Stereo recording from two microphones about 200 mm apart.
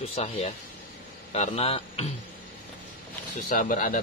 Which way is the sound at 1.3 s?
30° left (ahead or behind).